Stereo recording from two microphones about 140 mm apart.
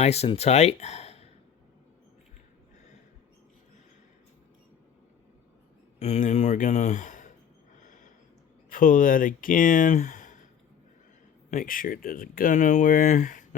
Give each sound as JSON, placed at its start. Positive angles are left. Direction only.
{"t": 0.0, "sound": "speech", "side_deg": 50}
{"t": 6.0, "sound": "speech", "side_deg": 55}
{"t": 7.8, "sound": "a sound", "side_deg": 70}
{"t": 8.7, "sound": "speech", "side_deg": 75}
{"t": 11.5, "sound": "speech", "side_deg": 85}